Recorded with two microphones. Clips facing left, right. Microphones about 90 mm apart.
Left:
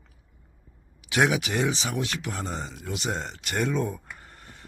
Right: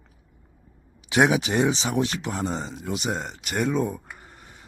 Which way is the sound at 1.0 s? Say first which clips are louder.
Right 3 dB; 25° right (ahead or behind).